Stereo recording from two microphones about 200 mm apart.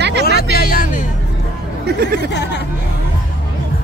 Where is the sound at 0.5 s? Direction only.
45° left (ahead or behind).